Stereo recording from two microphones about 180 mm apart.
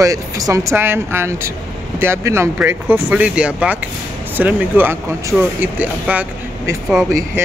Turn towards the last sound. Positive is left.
turn(degrees=-15)  # may be behind; listen again after turning